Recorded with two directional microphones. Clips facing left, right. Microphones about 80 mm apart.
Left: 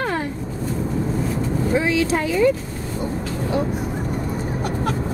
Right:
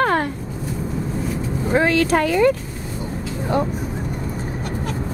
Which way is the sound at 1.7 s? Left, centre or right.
Right.